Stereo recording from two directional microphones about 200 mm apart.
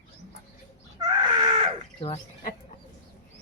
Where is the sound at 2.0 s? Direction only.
30° left (ahead or behind).